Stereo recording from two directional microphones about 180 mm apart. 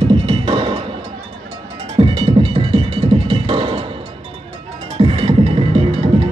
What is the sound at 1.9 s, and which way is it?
Music, 30° right (ahead or behind).